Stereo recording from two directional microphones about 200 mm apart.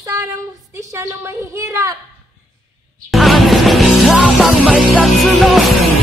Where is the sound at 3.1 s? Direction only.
Centre (ahead or behind).